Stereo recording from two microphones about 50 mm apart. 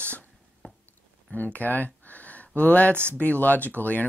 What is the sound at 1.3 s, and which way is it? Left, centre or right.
Speech, left.